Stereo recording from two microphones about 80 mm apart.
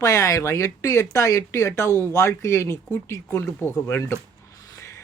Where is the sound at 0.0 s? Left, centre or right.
Left.